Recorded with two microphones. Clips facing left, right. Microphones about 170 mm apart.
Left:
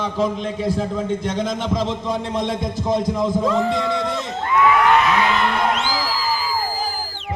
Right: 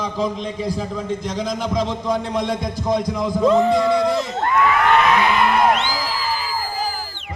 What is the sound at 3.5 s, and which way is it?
Music, 20° right (ahead or behind).